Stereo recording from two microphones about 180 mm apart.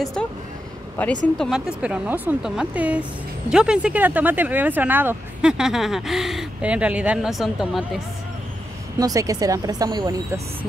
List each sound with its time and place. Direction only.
0.0 s speech: 5° left (ahead or behind)
1.4 s speech: 5° right (ahead or behind)
9.0 s speech: 20° right (ahead or behind)